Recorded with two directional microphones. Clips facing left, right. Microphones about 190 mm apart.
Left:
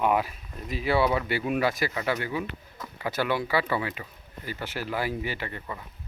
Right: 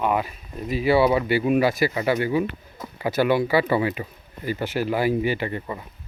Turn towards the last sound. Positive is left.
turn(degrees=-20)  # may be behind; listen again after turning